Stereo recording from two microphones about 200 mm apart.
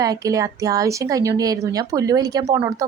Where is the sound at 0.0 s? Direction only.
15° right (ahead or behind).